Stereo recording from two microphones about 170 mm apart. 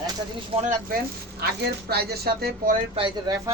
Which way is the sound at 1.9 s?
70° right (ahead or behind).